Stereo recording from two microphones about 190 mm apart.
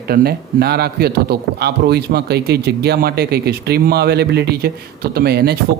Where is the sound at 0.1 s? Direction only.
55° right (ahead or behind).